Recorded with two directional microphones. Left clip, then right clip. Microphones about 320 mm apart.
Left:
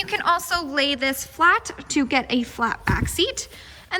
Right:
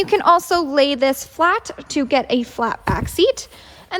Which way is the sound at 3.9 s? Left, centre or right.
Centre.